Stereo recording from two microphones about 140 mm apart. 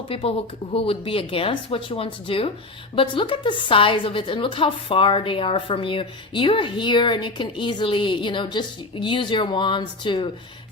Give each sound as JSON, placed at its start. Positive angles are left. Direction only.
{"t": 0.1, "sound": "a woman's voice", "side_deg": 45}